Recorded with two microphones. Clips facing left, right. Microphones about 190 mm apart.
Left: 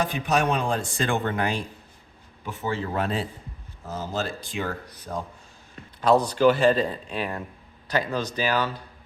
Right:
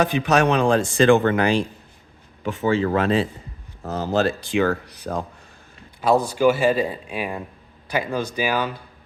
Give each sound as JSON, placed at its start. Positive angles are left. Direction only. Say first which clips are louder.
{"t": 0.0, "sound": "speech", "louder": "right 6 dB", "side_deg": -80}
{"t": 3.8, "sound": "speech", "louder": "right 8 dB", "side_deg": -70}
{"t": 6.0, "sound": "speech", "louder": "right 1 dB", "side_deg": -10}